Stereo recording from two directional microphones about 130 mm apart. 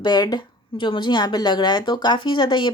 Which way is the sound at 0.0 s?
30° left (ahead or behind).